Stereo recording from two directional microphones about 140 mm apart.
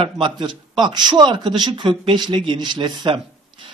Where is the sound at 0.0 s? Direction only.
35° right (ahead or behind).